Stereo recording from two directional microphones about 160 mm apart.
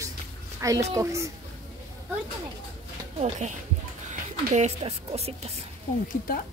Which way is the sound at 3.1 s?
45° right (ahead or behind).